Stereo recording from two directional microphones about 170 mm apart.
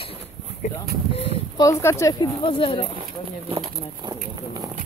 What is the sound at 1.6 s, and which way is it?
Speech, 15° left (ahead or behind).